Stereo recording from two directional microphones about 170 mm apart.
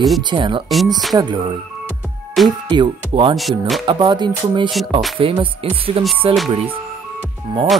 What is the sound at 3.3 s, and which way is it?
Music, centre (ahead or behind).